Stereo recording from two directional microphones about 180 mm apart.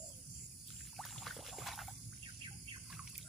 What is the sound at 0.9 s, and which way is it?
Pour, centre (ahead or behind).